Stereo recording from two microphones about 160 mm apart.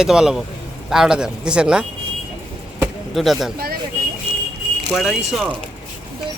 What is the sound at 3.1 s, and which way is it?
Speech, centre (ahead or behind).